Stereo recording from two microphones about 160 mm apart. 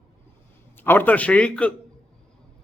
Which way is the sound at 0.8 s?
10° left (ahead or behind).